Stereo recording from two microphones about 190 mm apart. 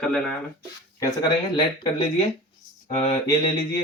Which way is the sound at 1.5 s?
25° left (ahead or behind).